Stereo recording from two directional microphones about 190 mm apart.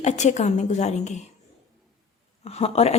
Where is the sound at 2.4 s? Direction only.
35° left (ahead or behind).